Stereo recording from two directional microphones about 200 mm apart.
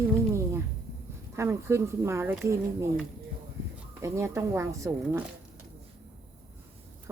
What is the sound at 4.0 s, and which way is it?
Speech, 15° right (ahead or behind).